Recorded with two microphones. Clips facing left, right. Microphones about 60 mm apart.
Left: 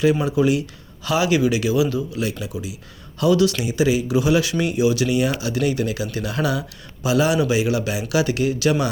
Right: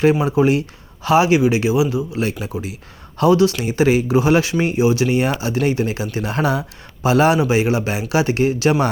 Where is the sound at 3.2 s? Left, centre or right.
Right.